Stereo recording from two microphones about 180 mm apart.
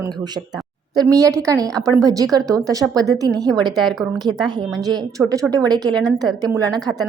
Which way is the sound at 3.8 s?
Centre (ahead or behind).